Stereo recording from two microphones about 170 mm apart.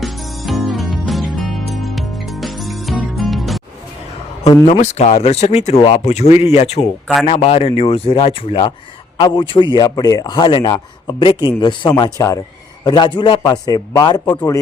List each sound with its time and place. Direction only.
0.0 s music: centre (ahead or behind)
4.7 s a man's voice: 40° left (ahead or behind); by 14.6 s 25° left (ahead or behind)